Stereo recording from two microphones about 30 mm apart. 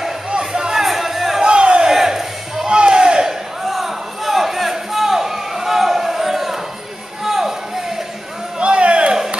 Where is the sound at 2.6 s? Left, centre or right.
Right.